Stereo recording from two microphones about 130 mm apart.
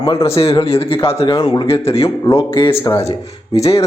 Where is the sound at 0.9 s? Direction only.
45° left (ahead or behind).